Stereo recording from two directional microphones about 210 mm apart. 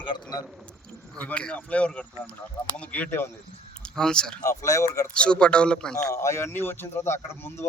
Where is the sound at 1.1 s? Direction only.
5° left (ahead or behind).